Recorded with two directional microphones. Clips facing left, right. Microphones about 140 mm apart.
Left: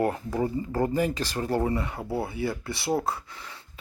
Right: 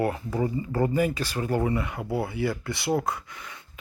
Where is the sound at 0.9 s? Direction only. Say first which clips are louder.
Right 1 dB; 40° left (ahead or behind).